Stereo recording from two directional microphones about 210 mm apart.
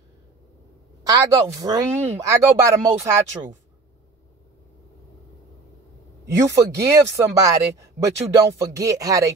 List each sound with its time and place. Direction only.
1.0 s speech: 15° right (ahead or behind)
6.2 s speech: 15° right (ahead or behind)